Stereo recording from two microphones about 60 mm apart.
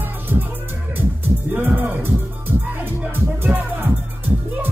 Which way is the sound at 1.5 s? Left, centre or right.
Right.